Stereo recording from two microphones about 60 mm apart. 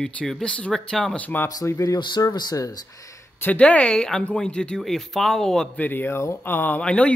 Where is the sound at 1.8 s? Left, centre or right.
Left.